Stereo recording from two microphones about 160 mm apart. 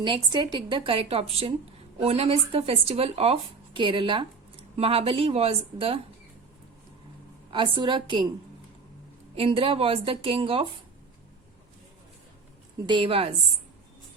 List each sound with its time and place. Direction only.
0.0 s a woman's voice: 30° right (ahead or behind)
7.5 s a woman's voice: 30° right (ahead or behind)
9.3 s a woman's voice: 35° right (ahead or behind)
12.8 s a woman's voice: 30° right (ahead or behind)